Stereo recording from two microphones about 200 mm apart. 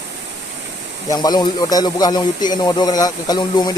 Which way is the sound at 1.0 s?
20° left (ahead or behind).